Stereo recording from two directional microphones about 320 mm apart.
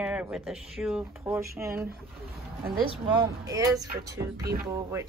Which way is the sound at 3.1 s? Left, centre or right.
Centre.